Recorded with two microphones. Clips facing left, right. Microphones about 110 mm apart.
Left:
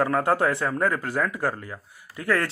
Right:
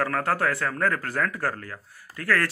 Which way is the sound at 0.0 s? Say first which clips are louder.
Left 3 dB; 20° left (ahead or behind).